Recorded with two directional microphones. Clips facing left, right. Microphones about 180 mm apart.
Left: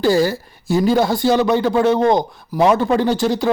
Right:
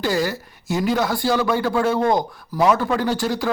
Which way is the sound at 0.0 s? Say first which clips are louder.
Left 6 dB; 30° left (ahead or behind).